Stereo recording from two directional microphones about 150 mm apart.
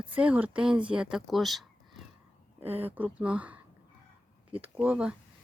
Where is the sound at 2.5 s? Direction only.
15° right (ahead or behind).